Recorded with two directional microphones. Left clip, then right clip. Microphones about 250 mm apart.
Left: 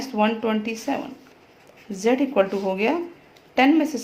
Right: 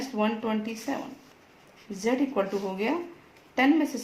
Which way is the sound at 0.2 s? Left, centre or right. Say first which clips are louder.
Left 7 dB; left.